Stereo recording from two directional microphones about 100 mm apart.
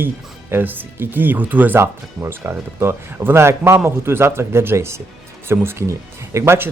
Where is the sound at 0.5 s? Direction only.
20° right (ahead or behind).